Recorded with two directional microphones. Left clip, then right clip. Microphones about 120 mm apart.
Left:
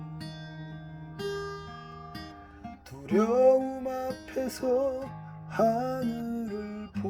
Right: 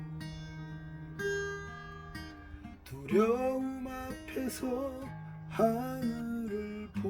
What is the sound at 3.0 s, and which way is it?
Music, 25° left (ahead or behind).